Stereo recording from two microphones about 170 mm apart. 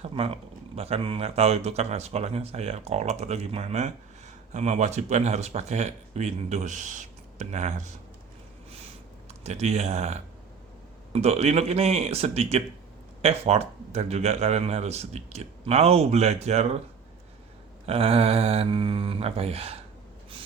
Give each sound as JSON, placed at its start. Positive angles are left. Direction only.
{"t": 0.0, "sound": "a man's voice", "side_deg": -35}
{"t": 9.4, "sound": "a man's voice", "side_deg": -40}
{"t": 17.8, "sound": "a man's voice", "side_deg": -35}